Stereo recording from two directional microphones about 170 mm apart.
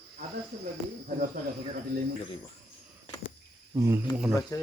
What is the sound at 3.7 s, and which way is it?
Speech, 15° right (ahead or behind).